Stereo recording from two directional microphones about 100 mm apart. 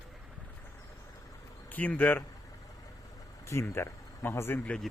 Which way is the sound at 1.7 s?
15° left (ahead or behind).